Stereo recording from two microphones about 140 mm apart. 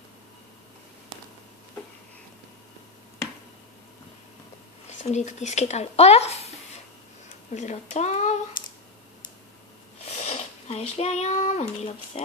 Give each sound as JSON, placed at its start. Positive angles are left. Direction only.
{"t": 4.8, "sound": "speech", "side_deg": 55}
{"t": 7.5, "sound": "a child's voice", "side_deg": 55}
{"t": 9.9, "sound": "speech", "side_deg": 50}